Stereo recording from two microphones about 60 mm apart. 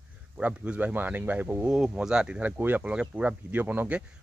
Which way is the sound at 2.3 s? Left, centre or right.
Right.